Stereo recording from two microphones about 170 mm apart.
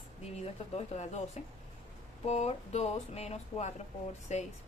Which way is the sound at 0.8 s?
40° left (ahead or behind).